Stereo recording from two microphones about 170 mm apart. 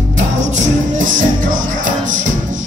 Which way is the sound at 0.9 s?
50° right (ahead or behind).